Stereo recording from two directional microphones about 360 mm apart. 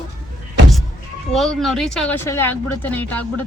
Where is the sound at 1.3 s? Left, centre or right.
Centre.